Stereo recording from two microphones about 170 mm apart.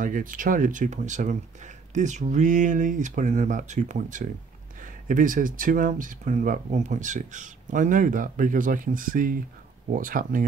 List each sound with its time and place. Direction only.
0.0 s speech: 55° right (ahead or behind)